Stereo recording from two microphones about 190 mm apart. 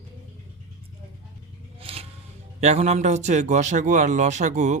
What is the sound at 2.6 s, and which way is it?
A man's voice, 35° right (ahead or behind).